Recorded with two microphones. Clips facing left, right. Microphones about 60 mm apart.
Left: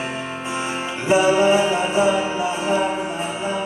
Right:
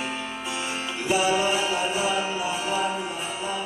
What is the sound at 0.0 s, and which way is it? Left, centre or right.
Music, left.